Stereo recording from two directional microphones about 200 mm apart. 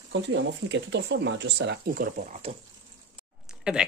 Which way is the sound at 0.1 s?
65° right (ahead or behind).